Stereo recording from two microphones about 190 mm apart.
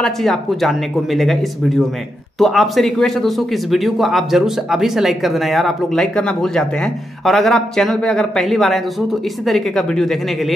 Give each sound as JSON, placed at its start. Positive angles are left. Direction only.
{"t": 0.0, "sound": "a man's voice", "side_deg": 0}